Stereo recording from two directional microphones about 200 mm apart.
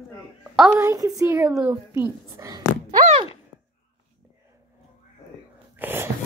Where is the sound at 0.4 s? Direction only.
Centre (ahead or behind).